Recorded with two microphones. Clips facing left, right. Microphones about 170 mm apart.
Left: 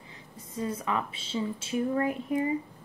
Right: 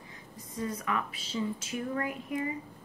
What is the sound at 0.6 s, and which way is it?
Speech, 25° left (ahead or behind).